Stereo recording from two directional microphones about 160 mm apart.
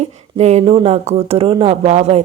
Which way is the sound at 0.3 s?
45° right (ahead or behind).